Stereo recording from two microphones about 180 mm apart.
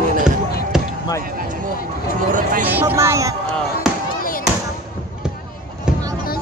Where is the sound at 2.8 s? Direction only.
10° right (ahead or behind).